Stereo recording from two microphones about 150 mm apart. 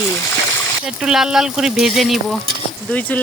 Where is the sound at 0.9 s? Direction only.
5° right (ahead or behind).